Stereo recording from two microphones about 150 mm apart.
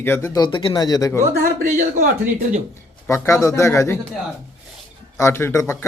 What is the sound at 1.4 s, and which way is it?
Speech, 60° right (ahead or behind).